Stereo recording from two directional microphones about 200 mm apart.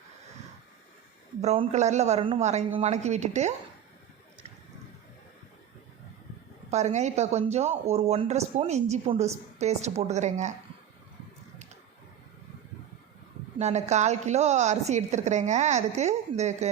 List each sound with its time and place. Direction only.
1.4 s speech: 35° right (ahead or behind)
6.7 s speech: 35° right (ahead or behind)
13.6 s speech: 35° right (ahead or behind)